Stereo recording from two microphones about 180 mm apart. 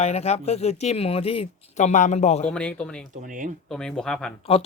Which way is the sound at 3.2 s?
45° right (ahead or behind).